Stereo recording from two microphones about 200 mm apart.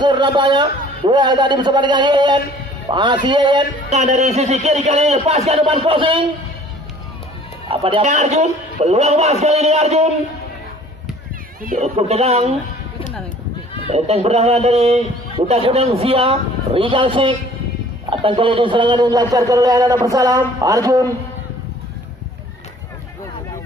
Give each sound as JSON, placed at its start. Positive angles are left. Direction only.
{"t": 0.0, "sound": "a man's voice", "side_deg": -25}
{"t": 3.8, "sound": "a man's voice", "side_deg": -35}
{"t": 7.7, "sound": "a man's voice", "side_deg": -25}
{"t": 11.6, "sound": "a man's voice", "side_deg": -35}
{"t": 13.8, "sound": "a man's voice", "side_deg": -30}